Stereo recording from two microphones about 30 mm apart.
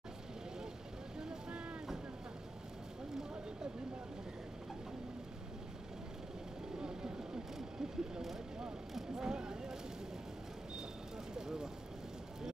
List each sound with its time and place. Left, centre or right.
6.8 s vehicle: right
7.5 s vehicle: centre
9.1 s a sound: right
11.3 s vehicle: right